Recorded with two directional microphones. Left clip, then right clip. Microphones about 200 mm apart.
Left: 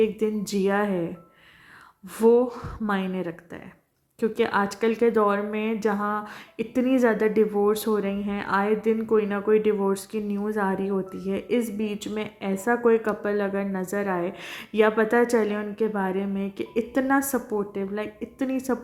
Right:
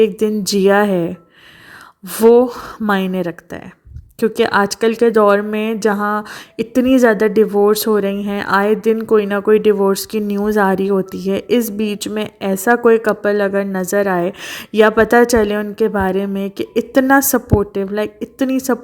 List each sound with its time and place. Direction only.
0.0 s speech: 45° right (ahead or behind)